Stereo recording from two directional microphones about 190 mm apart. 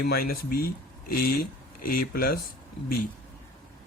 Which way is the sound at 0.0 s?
55° left (ahead or behind).